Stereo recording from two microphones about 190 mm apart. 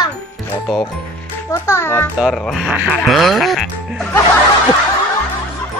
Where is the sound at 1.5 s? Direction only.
15° left (ahead or behind).